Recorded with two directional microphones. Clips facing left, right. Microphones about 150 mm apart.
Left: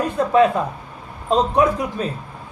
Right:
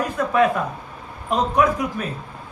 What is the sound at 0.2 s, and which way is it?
A man's voice, 30° left (ahead or behind).